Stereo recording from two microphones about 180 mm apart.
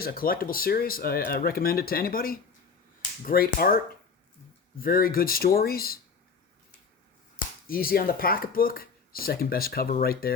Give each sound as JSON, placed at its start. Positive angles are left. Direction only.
{"t": 0.0, "sound": "speech", "side_deg": 55}
{"t": 7.7, "sound": "speech", "side_deg": 55}